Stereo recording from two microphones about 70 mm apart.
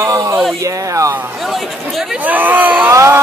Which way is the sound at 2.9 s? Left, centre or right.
Right.